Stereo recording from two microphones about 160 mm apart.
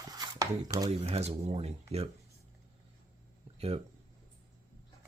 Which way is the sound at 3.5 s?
40° right (ahead or behind).